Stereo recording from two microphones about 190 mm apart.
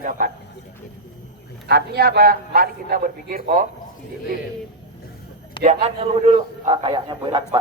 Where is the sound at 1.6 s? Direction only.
60° right (ahead or behind).